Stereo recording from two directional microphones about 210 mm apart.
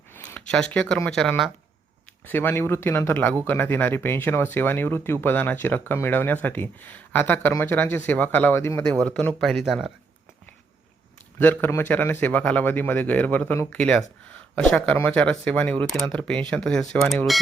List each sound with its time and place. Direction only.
0.1 s speech: 5° left (ahead or behind)
11.3 s speech: 10° left (ahead or behind)